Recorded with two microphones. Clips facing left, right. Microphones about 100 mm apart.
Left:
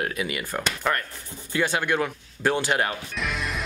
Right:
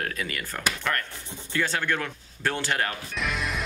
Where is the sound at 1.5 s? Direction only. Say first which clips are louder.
Left 3 dB; 15° left (ahead or behind).